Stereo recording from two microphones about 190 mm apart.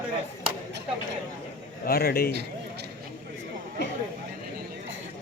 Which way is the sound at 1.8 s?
55° left (ahead or behind).